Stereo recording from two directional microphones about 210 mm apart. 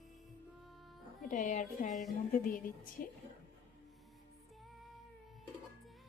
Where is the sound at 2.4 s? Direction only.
40° left (ahead or behind).